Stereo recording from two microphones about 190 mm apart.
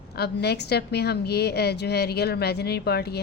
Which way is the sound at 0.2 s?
60° left (ahead or behind).